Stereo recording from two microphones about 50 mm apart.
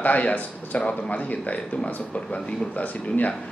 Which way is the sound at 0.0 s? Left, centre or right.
Left.